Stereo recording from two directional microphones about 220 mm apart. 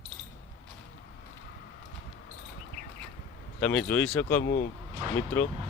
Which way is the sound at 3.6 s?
5° left (ahead or behind).